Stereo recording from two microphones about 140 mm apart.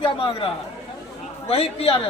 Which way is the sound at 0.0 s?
40° left (ahead or behind).